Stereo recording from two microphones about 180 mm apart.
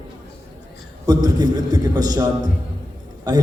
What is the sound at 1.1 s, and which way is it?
A man's voice, 20° right (ahead or behind).